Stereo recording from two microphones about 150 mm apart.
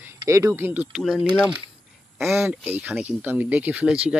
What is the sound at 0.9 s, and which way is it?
Speech, 5° right (ahead or behind).